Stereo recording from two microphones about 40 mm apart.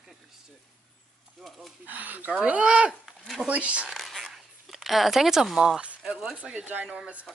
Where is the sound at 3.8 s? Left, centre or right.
Centre.